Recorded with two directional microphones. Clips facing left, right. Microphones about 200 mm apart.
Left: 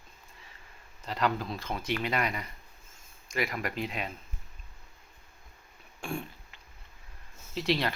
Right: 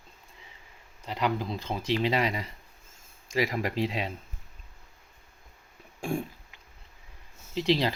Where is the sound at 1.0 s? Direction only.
15° right (ahead or behind).